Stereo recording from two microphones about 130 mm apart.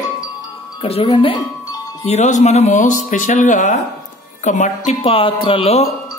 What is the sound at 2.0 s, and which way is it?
Speech, 65° left (ahead or behind).